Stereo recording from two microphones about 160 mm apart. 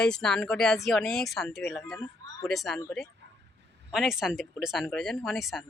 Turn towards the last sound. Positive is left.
turn(degrees=0)  # may be behind; listen again after turning